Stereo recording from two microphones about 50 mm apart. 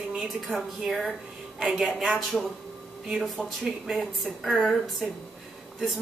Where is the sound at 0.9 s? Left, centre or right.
Centre.